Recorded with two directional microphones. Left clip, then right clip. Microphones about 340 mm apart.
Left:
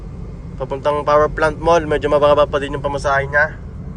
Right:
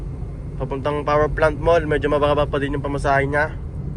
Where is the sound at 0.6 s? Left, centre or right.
Centre.